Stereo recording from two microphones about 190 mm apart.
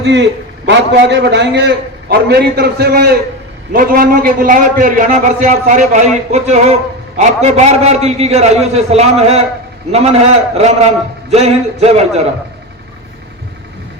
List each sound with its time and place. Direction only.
0.0 s a man's voice: 70° right (ahead or behind); by 9.4 s 35° right (ahead or behind)
10.6 s a man's voice: 35° right (ahead or behind)